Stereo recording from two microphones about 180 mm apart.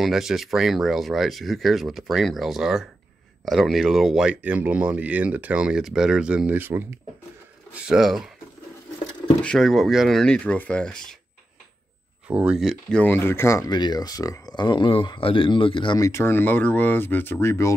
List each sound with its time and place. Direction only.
0.0 s speech: centre (ahead or behind)
9.4 s speech: centre (ahead or behind)
12.3 s speech: 5° right (ahead or behind); by 17.7 s 15° left (ahead or behind)